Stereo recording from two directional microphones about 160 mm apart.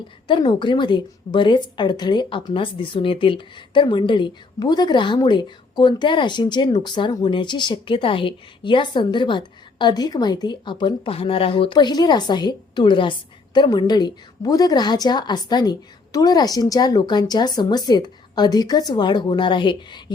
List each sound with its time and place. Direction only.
0.3 s a woman's voice: 30° left (ahead or behind)